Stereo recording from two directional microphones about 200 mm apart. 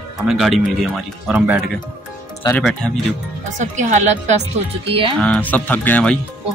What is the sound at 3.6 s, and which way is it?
Speech, 35° right (ahead or behind).